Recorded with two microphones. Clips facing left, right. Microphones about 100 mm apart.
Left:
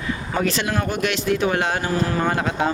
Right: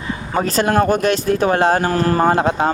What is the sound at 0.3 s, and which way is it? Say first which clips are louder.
Speech: right 7 dB; 40° right (ahead or behind).